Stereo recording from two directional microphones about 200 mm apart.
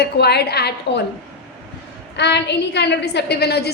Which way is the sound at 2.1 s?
60° left (ahead or behind).